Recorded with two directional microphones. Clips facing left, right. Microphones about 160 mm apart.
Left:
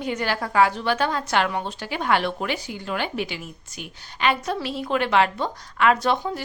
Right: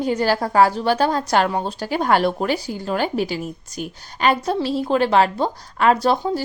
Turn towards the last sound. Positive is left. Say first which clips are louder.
# right 5 dB
turn(degrees=-35)  # may be behind; listen again after turning